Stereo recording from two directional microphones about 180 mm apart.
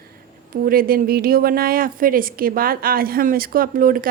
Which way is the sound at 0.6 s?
55° right (ahead or behind).